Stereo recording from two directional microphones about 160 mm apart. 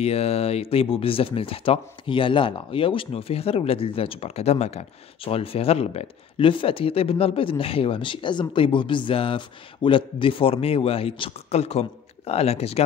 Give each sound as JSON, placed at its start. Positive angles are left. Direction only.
{"t": 0.0, "sound": "speech", "side_deg": 40}